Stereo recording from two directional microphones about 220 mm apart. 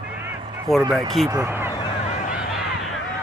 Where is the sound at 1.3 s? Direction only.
10° right (ahead or behind).